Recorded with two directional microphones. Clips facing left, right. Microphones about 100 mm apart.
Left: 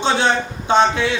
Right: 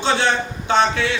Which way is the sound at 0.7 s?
20° left (ahead or behind).